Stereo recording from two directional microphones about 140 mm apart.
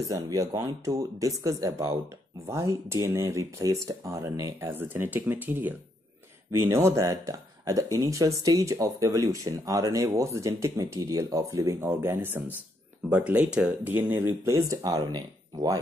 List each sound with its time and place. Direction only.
0.1 s speech: 25° right (ahead or behind)